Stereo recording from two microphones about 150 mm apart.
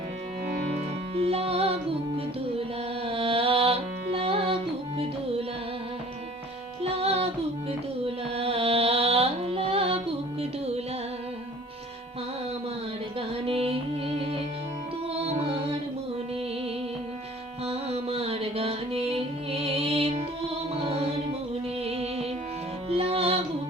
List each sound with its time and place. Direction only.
1.1 s music: 40° right (ahead or behind)
6.8 s music: 40° right (ahead or behind)
13.1 s music: 40° right (ahead or behind)
17.7 s music: 40° right (ahead or behind)